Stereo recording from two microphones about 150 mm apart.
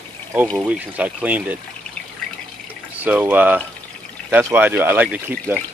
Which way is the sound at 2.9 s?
10° right (ahead or behind).